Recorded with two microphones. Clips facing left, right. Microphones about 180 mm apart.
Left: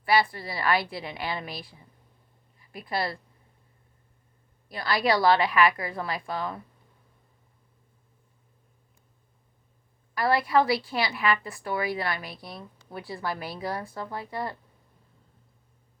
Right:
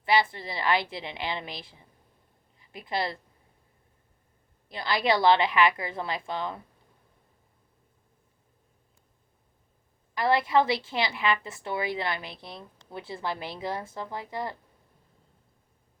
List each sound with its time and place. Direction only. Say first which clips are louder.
0.0 s a woman's voice: left 1 dB; 20° right (ahead or behind)
4.7 s a woman's voice: left 1 dB; 20° right (ahead or behind)
10.2 s a woman's voice: even; 20° right (ahead or behind)